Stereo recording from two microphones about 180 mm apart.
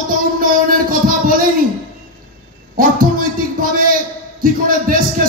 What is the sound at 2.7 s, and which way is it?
Speech, 50° right (ahead or behind).